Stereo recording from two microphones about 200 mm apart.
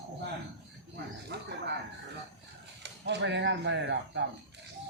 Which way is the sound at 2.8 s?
60° right (ahead or behind).